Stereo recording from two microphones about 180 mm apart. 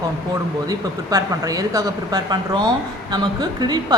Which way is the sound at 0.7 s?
20° right (ahead or behind).